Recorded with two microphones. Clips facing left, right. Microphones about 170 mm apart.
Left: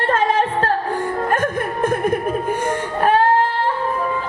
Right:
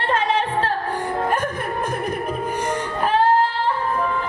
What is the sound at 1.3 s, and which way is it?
Chuckle, 50° left (ahead or behind).